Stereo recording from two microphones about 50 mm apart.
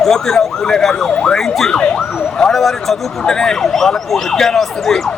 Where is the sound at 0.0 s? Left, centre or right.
Centre.